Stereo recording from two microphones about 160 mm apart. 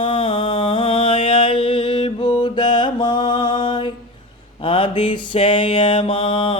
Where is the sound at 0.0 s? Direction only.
35° left (ahead or behind).